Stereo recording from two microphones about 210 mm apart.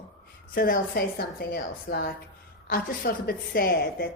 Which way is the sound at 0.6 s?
45° left (ahead or behind).